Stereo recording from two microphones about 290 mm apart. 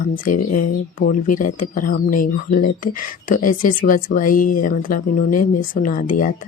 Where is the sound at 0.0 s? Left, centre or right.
Left.